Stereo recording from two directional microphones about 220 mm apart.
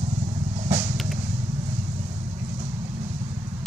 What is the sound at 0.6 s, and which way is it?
Vehicle, 30° right (ahead or behind).